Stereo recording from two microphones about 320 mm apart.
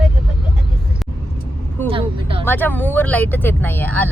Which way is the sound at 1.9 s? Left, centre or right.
Centre.